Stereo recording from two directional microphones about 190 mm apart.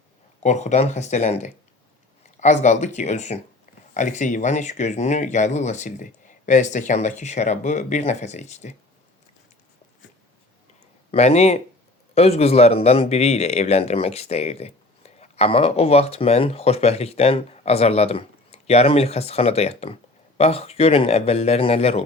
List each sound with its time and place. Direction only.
0.4 s speech: 35° left (ahead or behind)
11.1 s speech: 35° left (ahead or behind)